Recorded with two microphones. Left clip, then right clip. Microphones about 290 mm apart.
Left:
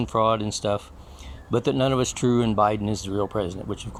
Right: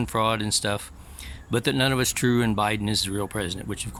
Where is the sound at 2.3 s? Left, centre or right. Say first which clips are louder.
Left 3 dB; right.